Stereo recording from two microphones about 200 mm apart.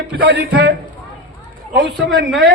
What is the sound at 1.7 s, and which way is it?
Speech, 65° right (ahead or behind).